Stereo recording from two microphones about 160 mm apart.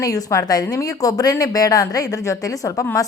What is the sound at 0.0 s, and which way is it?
A woman's voice, 20° left (ahead or behind).